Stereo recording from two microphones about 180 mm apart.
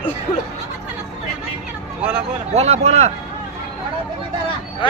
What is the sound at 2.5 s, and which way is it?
Speech, 35° right (ahead or behind).